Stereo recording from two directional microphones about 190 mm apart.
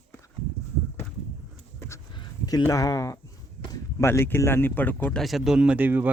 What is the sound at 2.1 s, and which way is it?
Speech, 20° left (ahead or behind).